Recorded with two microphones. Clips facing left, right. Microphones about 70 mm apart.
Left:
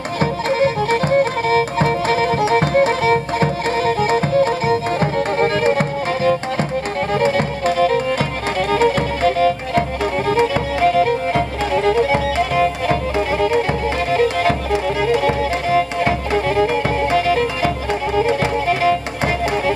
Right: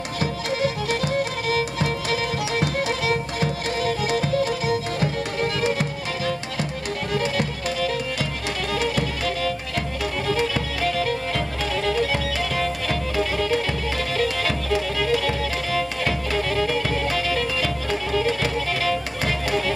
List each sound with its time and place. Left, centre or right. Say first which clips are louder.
0.2 s music: left 7 dB; left